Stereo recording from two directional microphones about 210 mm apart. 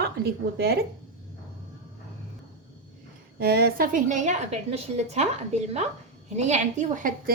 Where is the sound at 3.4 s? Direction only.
50° right (ahead or behind).